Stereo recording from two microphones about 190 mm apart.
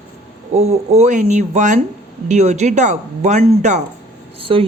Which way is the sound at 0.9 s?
35° right (ahead or behind).